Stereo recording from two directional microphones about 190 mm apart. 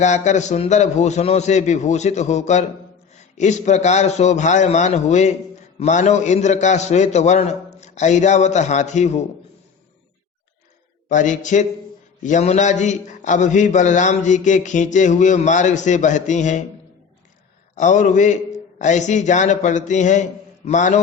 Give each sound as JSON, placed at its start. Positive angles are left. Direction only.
{"t": 0.0, "sound": "speech", "side_deg": 35}
{"t": 11.1, "sound": "speech", "side_deg": 40}
{"t": 17.7, "sound": "speech", "side_deg": 40}